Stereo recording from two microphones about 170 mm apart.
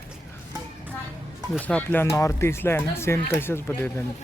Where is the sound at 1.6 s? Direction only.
10° left (ahead or behind).